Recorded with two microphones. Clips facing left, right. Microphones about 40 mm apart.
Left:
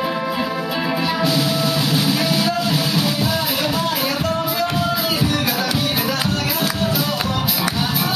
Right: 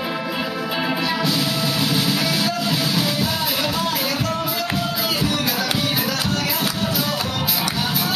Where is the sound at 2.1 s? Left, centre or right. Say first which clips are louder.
Left 2 dB; centre.